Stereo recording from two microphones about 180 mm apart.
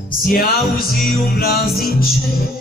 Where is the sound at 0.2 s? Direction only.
55° left (ahead or behind).